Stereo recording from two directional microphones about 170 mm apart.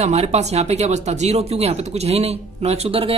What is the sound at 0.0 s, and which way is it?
Speech, 40° right (ahead or behind).